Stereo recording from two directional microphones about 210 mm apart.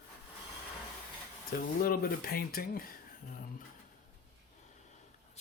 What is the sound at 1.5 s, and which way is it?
Speech, 45° left (ahead or behind).